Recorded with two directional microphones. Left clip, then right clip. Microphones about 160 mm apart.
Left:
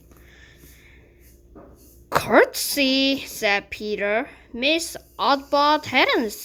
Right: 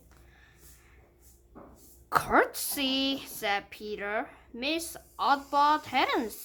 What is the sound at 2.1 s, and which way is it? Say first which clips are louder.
Speech: left 8 dB; 20° left (ahead or behind).